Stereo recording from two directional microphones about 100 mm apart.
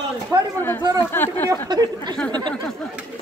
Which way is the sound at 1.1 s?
20° left (ahead or behind).